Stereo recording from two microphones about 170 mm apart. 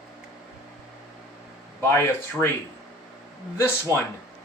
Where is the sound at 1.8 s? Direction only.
15° left (ahead or behind).